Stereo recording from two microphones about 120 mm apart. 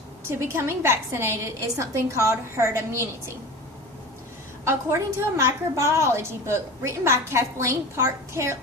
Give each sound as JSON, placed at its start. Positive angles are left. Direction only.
{"t": 0.3, "sound": "a woman's voice", "side_deg": -20}
{"t": 4.6, "sound": "a woman's voice", "side_deg": -25}